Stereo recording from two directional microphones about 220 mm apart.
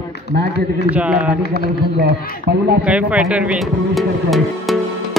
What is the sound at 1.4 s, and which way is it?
Speech, 45° left (ahead or behind).